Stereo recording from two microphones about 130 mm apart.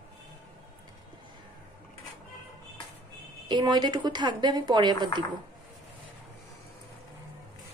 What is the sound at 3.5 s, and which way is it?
Speech, 35° right (ahead or behind).